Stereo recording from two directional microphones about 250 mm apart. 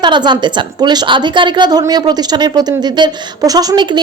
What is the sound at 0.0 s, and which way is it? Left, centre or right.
A woman's voice, centre.